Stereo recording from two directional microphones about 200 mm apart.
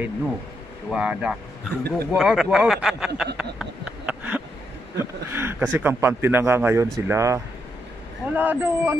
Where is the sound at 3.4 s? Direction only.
5° right (ahead or behind).